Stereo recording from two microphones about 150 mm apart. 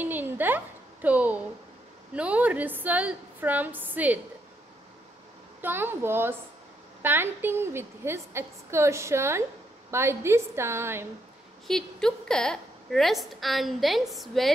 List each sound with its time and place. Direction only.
0.0 s a sound: 10° right (ahead or behind)
1.0 s a woman's voice: 10° right (ahead or behind)
5.6 s a woman's voice: 15° right (ahead or behind)
11.6 s a woman's voice: 5° left (ahead or behind)